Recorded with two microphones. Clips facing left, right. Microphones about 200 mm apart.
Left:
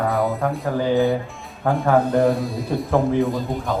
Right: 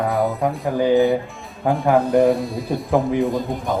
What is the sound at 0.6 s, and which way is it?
Speech, 15° right (ahead or behind).